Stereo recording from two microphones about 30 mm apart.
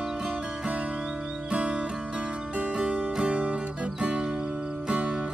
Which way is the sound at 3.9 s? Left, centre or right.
Right.